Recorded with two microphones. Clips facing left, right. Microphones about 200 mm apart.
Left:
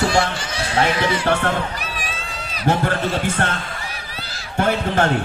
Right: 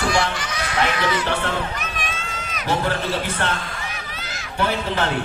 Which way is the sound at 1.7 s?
35° left (ahead or behind).